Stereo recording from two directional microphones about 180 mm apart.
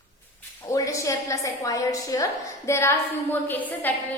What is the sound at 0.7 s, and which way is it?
A woman's voice, 20° left (ahead or behind).